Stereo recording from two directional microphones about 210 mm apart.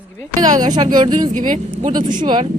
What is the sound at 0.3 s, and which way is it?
Speech, 20° right (ahead or behind).